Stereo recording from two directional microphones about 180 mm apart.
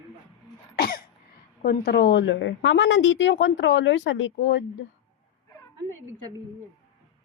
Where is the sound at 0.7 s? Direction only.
55° left (ahead or behind).